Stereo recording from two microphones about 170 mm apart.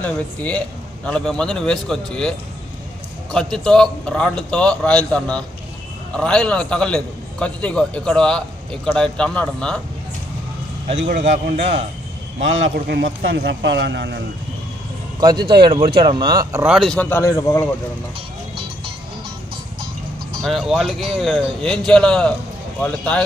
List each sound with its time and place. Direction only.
0.0 s a man's voice: 10° left (ahead or behind)
11.1 s a man's voice: 40° right (ahead or behind)
12.7 s speech: 65° right (ahead or behind); by 14.2 s 90° right
15.1 s speech: 25° right (ahead or behind)
16.5 s a man's voice: 5° right (ahead or behind); by 17.6 s 15° left (ahead or behind)
20.4 s a man's voice: centre (ahead or behind)